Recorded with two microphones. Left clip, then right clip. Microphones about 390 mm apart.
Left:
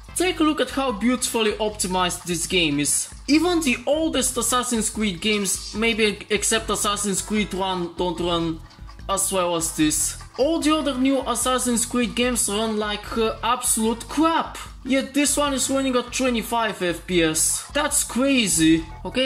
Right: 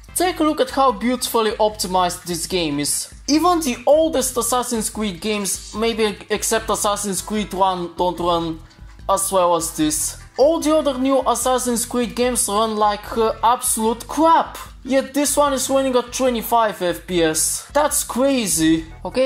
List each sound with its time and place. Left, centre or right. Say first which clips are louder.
0.2 s speech: right 3 dB; centre